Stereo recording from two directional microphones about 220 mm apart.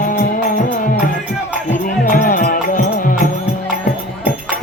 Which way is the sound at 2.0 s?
35° left (ahead or behind).